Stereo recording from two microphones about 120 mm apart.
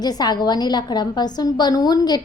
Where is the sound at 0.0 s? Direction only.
35° left (ahead or behind).